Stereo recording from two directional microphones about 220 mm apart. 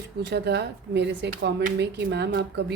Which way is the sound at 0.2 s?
50° right (ahead or behind).